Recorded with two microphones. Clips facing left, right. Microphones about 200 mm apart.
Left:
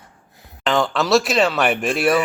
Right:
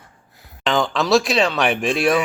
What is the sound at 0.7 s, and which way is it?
Speech, centre (ahead or behind).